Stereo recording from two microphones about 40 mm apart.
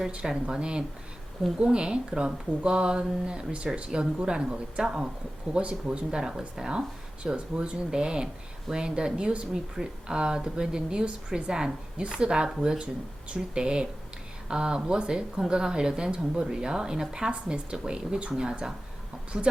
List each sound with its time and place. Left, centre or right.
0.1 s speech: right